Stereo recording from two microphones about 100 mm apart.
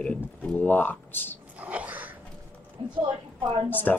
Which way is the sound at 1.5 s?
15° right (ahead or behind).